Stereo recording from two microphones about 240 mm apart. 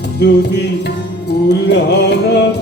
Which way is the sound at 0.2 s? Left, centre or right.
Left.